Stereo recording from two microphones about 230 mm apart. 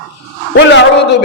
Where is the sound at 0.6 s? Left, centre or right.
Left.